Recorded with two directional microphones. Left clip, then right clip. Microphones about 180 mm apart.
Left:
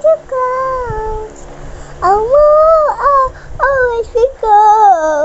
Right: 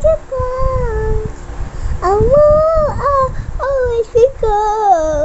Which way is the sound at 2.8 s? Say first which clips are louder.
Left 4 dB; 15° right (ahead or behind).